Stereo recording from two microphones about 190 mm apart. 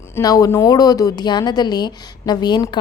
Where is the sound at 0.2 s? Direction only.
20° left (ahead or behind).